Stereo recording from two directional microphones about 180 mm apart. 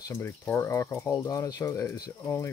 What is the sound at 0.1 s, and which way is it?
Speech, 15° left (ahead or behind).